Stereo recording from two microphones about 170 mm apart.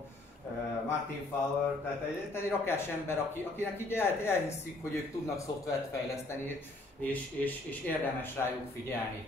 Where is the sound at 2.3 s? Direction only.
15° left (ahead or behind).